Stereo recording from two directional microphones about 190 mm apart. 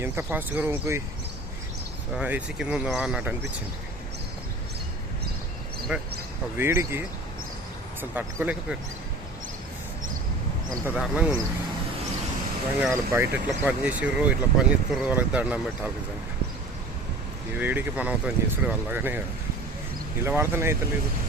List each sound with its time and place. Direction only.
0.0 s speech: 10° right (ahead or behind)
2.1 s speech: 5° right (ahead or behind)
5.9 s speech: 5° right (ahead or behind)
8.1 s speech: 5° right (ahead or behind)
10.8 s speech: 5° right (ahead or behind)
12.9 s speech: 15° right (ahead or behind)
17.6 s speech: 10° right (ahead or behind)
20.2 s speech: 10° right (ahead or behind)